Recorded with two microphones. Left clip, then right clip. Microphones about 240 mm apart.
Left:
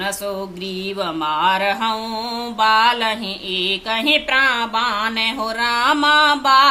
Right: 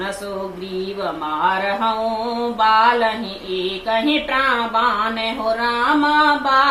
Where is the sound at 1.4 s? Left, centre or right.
Left.